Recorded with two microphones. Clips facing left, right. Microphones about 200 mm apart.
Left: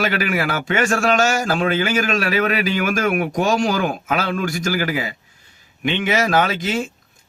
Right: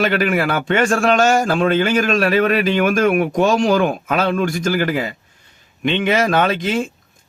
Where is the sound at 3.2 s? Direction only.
45° left (ahead or behind).